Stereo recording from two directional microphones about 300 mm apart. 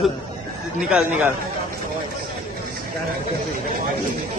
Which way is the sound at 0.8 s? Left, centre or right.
Centre.